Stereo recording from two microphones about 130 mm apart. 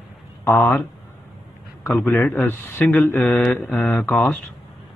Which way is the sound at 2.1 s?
15° left (ahead or behind).